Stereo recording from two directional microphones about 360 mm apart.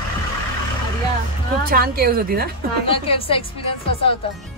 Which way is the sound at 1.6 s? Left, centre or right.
Right.